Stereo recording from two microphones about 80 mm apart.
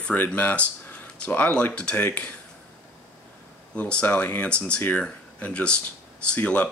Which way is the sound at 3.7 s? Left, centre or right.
Centre.